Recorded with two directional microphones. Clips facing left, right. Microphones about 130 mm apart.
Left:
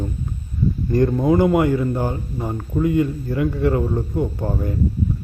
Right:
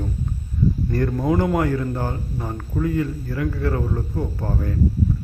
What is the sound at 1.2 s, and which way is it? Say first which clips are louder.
Speech: left 3 dB; 5° left (ahead or behind).